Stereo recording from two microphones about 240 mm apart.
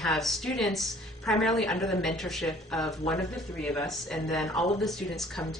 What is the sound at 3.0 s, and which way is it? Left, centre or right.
Speech, left.